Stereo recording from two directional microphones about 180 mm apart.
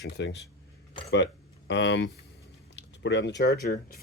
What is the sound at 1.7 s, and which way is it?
Speech, 80° left.